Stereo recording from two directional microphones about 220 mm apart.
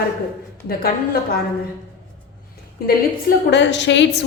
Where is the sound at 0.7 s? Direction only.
45° left (ahead or behind).